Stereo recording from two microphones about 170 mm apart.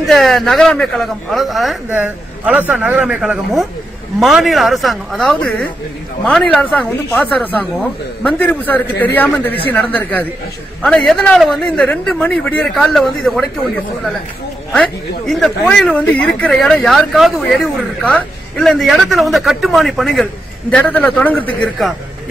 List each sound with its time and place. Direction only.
0.0 s a man's voice: centre (ahead or behind)
14.7 s speech: 5° left (ahead or behind)